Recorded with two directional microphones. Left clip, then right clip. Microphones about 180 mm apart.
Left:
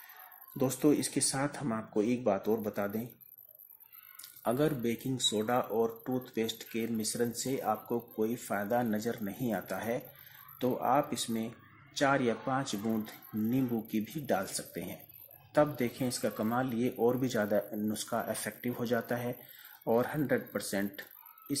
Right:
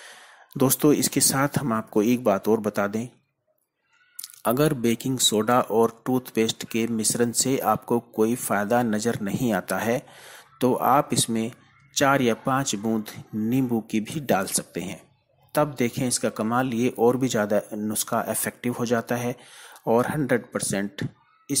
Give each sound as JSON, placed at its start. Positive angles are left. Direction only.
{"t": 0.6, "sound": "speech", "side_deg": -35}
{"t": 4.2, "sound": "speech", "side_deg": -30}